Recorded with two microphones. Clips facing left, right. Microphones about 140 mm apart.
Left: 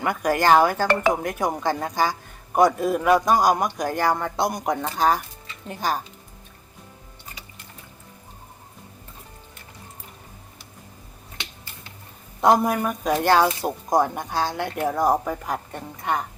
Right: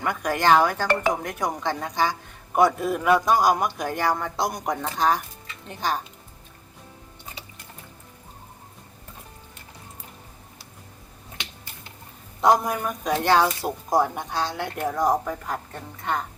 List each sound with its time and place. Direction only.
0.0 s speech: 5° left (ahead or behind)
12.4 s speech: centre (ahead or behind)